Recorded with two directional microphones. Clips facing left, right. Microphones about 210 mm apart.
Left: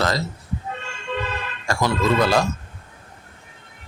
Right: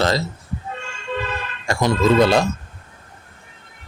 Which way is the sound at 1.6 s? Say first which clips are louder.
Right 4 dB; 20° right (ahead or behind).